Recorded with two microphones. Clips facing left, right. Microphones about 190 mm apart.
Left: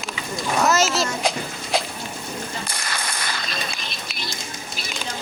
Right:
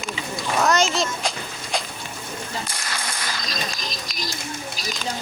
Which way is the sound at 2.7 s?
55° left (ahead or behind).